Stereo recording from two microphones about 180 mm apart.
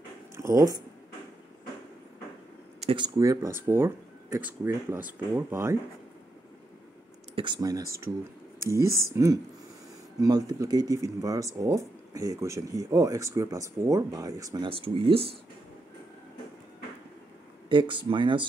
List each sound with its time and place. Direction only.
0.4 s speech: 20° right (ahead or behind)
2.8 s speech: 30° right (ahead or behind)
3.2 s speech: 15° right (ahead or behind)
7.3 s speech: 25° right (ahead or behind)
17.6 s speech: 25° right (ahead or behind)